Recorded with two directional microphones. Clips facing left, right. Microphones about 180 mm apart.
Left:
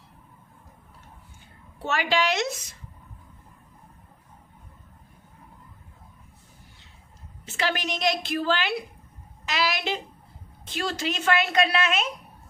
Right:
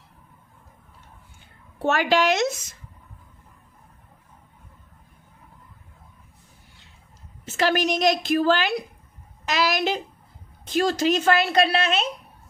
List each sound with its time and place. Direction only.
1.8 s a woman's voice: 50° right (ahead or behind)
7.4 s a woman's voice: 45° right (ahead or behind)